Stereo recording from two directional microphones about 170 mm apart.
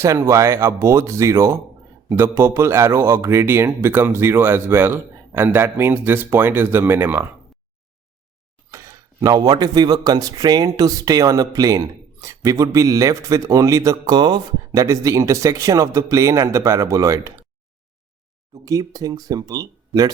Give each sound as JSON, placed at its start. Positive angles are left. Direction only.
{"t": 0.0, "sound": "speech", "side_deg": -20}
{"t": 8.7, "sound": "speech", "side_deg": -20}
{"t": 18.5, "sound": "speech", "side_deg": -20}